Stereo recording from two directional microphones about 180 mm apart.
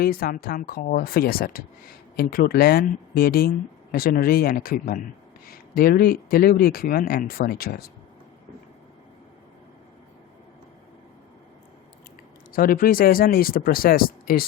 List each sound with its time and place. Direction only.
0.0 s speech: 55° left (ahead or behind)
12.5 s speech: 55° left (ahead or behind)